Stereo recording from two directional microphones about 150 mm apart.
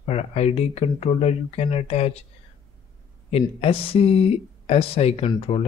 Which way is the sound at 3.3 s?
45° left (ahead or behind).